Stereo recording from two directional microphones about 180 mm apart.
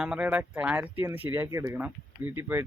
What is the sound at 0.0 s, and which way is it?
Speech, 5° right (ahead or behind).